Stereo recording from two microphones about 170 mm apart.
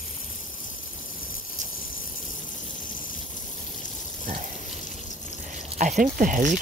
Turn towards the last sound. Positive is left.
turn(degrees=-50)  # may be behind; listen again after turning